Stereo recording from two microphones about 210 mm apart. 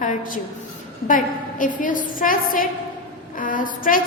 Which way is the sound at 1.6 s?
40° left (ahead or behind).